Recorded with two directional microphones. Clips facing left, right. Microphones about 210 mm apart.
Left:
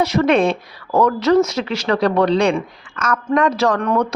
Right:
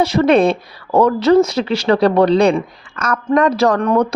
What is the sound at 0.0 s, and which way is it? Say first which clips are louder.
Speech: right 3 dB; 30° right (ahead or behind).